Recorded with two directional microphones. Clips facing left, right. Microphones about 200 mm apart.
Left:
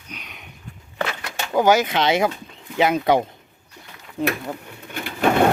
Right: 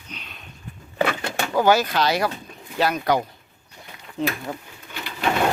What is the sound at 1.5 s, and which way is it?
Speech, 15° left (ahead or behind).